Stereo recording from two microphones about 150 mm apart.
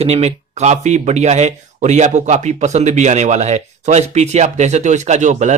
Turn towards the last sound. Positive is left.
turn(degrees=-55)  # may be behind; listen again after turning